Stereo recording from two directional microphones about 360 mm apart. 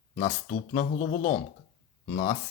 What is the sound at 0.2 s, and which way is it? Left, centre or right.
Speech, centre.